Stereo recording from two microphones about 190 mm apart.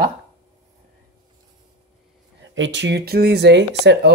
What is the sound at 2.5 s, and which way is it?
Speech, 75° right (ahead or behind).